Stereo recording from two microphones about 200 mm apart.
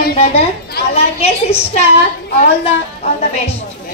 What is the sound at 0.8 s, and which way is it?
Child singing, 30° left (ahead or behind).